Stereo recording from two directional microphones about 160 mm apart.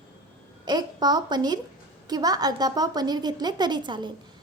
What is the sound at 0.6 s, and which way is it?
A woman's voice, 25° right (ahead or behind).